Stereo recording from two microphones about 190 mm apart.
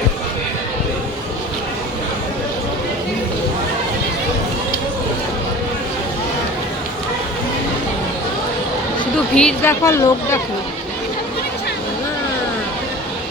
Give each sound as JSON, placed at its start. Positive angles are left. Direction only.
{"t": 9.3, "sound": "a woman's voice", "side_deg": 5}
{"t": 9.8, "sound": "speech", "side_deg": 15}